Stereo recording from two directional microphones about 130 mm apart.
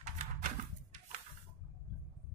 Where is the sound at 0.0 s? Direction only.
70° right (ahead or behind).